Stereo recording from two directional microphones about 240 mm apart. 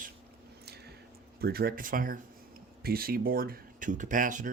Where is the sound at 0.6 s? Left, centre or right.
Right.